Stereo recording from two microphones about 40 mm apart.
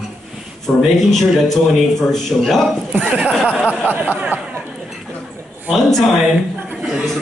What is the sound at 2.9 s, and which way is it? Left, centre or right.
Speech, right.